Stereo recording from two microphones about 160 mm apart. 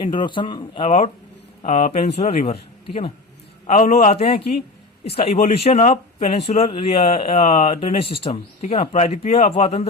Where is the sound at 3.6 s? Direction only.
50° left (ahead or behind).